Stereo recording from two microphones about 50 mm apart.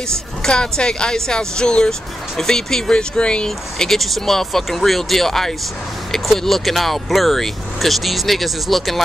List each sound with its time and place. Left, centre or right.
0.1 s speech: centre